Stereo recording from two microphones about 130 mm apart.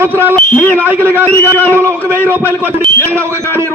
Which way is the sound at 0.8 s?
15° right (ahead or behind).